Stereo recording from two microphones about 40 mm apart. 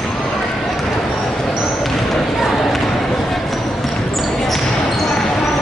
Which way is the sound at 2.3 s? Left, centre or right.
Centre.